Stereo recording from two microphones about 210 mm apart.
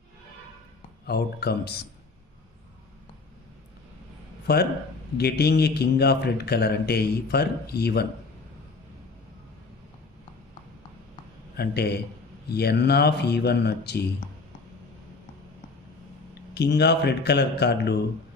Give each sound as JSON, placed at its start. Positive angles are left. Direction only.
{"t": 1.0, "sound": "speech", "side_deg": 50}
{"t": 5.1, "sound": "speech", "side_deg": 50}
{"t": 11.5, "sound": "speech", "side_deg": 50}
{"t": 16.3, "sound": "speech", "side_deg": 55}